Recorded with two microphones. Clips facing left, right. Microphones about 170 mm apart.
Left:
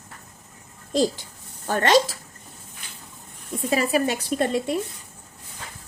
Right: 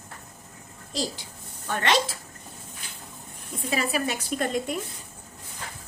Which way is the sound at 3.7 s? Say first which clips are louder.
Left 5 dB; 35° left (ahead or behind).